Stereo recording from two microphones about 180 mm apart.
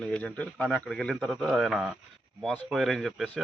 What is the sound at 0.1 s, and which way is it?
Speech, 5° left (ahead or behind).